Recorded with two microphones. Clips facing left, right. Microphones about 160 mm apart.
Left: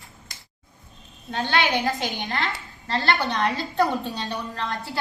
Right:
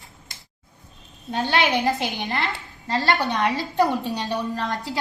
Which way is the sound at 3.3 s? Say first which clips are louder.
Right 2 dB; 20° right (ahead or behind).